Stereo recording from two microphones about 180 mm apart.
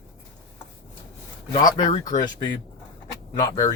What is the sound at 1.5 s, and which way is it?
Speech, 25° left (ahead or behind).